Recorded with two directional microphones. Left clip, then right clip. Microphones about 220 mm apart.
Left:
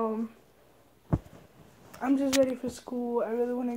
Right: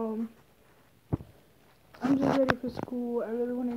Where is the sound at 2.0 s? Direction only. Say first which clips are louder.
Left 1 dB; 10° left (ahead or behind).